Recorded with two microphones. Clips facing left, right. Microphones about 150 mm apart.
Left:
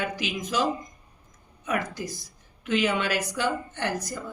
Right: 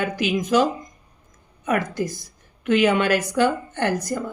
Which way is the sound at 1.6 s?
55° right (ahead or behind).